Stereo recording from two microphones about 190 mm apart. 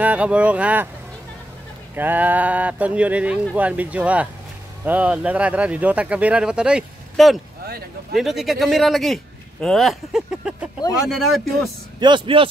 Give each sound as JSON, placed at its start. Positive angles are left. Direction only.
{"t": 0.0, "sound": "speech", "side_deg": -5}
{"t": 2.0, "sound": "speech", "side_deg": -10}
{"t": 7.6, "sound": "a sound", "side_deg": -55}
{"t": 8.2, "sound": "a man's voice", "side_deg": 0}
{"t": 12.0, "sound": "speech", "side_deg": -25}